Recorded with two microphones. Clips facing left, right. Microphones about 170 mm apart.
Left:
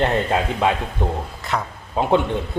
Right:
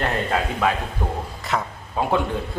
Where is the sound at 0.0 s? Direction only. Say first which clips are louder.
Left 4 dB; 25° left (ahead or behind).